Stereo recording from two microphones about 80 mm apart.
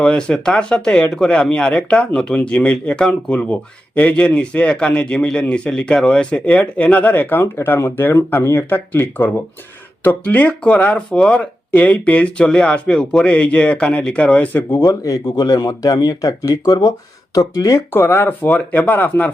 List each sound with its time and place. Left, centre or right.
0.0 s speech: centre
14.8 s speech: left
17.9 s speech: left